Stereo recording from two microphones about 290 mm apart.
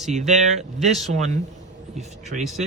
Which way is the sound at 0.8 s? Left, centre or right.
Centre.